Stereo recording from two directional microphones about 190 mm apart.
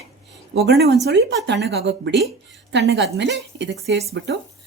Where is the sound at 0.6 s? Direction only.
60° right (ahead or behind).